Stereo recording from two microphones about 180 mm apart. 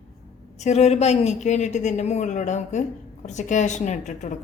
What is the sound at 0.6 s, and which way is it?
A woman's voice, 40° left (ahead or behind).